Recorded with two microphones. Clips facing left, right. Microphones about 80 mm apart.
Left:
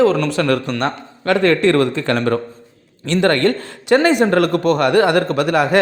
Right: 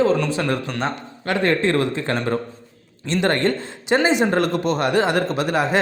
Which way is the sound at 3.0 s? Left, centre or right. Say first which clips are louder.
Left 4 dB; left.